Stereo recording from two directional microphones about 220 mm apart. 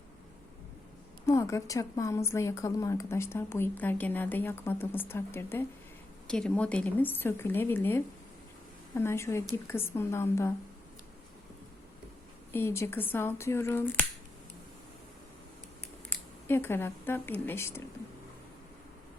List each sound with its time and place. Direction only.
1.3 s a woman's voice: 15° left (ahead or behind)
12.5 s a woman's voice: 10° left (ahead or behind)
16.0 s speech: 10° left (ahead or behind)